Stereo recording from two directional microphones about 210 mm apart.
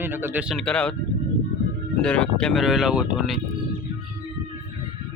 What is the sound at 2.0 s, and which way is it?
A man's voice, 5° left (ahead or behind).